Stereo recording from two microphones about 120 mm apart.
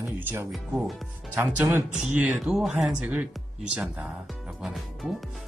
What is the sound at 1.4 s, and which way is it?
Speech, 15° right (ahead or behind).